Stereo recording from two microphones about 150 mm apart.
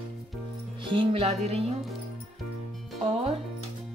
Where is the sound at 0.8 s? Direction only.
35° right (ahead or behind).